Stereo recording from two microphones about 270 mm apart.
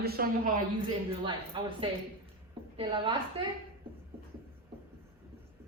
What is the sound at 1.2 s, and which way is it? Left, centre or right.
A woman's voice, centre.